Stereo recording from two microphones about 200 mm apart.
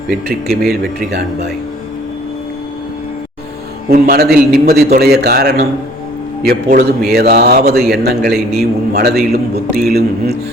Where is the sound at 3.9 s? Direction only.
50° right (ahead or behind).